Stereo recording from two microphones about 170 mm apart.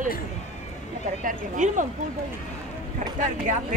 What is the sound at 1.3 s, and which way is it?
Speech, 50° right (ahead or behind).